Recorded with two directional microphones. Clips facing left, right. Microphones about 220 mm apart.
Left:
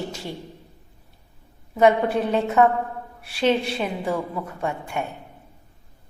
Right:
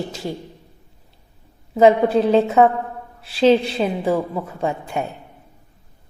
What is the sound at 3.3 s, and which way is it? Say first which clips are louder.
A woman's voice: right 6 dB; 30° right (ahead or behind).